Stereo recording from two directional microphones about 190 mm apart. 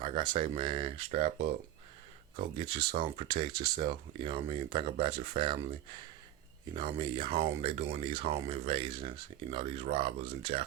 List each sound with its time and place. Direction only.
0.0 s speech: 25° right (ahead or behind)
6.7 s speech: 25° right (ahead or behind)